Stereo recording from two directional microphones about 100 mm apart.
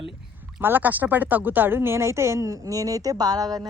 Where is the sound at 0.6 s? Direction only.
20° right (ahead or behind).